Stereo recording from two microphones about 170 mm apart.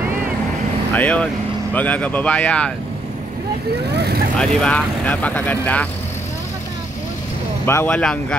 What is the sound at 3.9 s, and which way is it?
Vehicle, 70° right (ahead or behind).